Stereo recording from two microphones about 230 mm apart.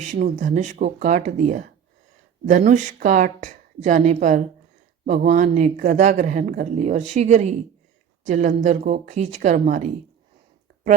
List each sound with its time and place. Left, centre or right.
0.0 s speech: right